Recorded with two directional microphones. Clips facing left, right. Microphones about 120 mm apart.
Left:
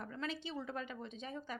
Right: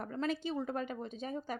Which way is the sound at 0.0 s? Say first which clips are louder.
Right 7 dB; 45° right (ahead or behind).